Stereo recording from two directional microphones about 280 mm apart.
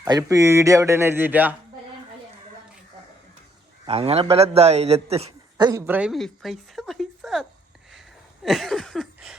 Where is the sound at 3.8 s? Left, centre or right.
Right; by 7.4 s centre.